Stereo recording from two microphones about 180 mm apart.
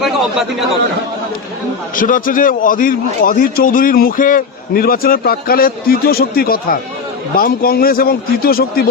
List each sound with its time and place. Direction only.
2.0 s a man's voice: 50° left (ahead or behind)